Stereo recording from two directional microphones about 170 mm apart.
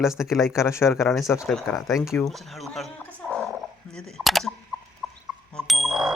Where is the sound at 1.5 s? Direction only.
Centre (ahead or behind).